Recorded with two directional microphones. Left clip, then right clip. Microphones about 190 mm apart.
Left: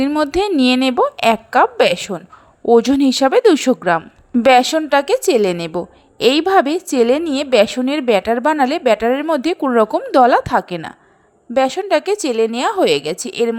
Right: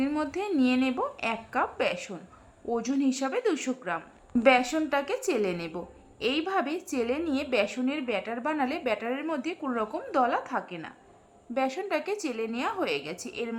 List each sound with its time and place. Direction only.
0.0 s a woman's voice: 40° left (ahead or behind)